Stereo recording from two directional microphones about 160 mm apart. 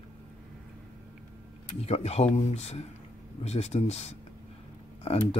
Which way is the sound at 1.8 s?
40° left (ahead or behind).